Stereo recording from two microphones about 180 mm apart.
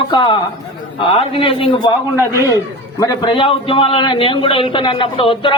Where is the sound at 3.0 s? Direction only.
20° left (ahead or behind).